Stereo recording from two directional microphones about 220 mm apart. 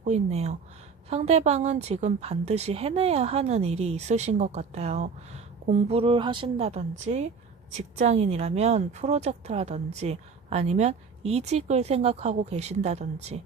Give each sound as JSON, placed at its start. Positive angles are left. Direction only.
{"t": 0.0, "sound": "a woman's voice", "side_deg": -30}